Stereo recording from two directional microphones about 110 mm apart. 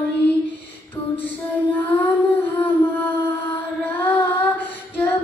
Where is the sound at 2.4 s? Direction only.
15° left (ahead or behind).